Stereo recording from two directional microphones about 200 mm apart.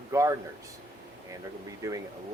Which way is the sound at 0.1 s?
15° right (ahead or behind).